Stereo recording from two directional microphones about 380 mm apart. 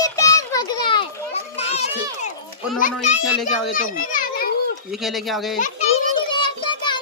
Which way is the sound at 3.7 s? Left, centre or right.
Left.